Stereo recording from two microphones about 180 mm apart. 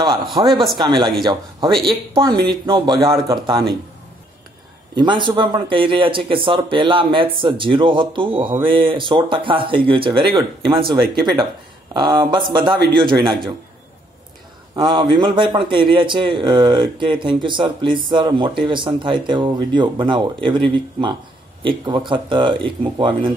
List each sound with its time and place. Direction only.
0.5 s speech: centre (ahead or behind)
0.7 s speech: 25° right (ahead or behind)
4.9 s speech: 25° right (ahead or behind)
14.8 s speech: 25° right (ahead or behind)